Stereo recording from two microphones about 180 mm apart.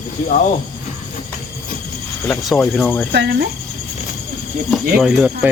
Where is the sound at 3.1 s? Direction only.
70° right (ahead or behind).